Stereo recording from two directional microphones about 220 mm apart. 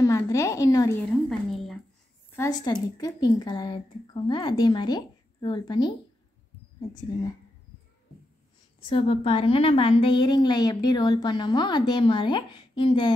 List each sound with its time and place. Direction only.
0.0 s a woman's voice: 15° left (ahead or behind)
1.5 s a sound: centre (ahead or behind)
2.3 s a woman's voice: 15° left (ahead or behind)
8.8 s a woman's voice: 25° left (ahead or behind)